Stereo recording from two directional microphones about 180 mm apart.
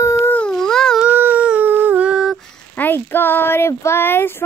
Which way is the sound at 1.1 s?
10° right (ahead or behind).